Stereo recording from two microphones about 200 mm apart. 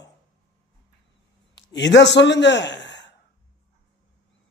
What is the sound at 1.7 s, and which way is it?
A man's voice, 60° left (ahead or behind).